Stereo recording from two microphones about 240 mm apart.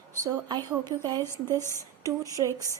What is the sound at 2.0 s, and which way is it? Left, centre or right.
Speech, centre.